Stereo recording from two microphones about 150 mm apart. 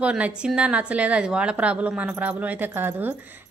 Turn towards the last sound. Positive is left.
turn(degrees=-15)  # may be behind; listen again after turning